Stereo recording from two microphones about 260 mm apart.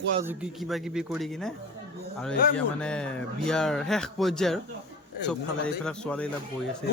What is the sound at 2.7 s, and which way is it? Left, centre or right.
Speech, centre.